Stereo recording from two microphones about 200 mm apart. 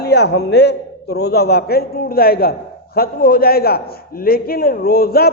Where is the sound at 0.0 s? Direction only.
55° left (ahead or behind).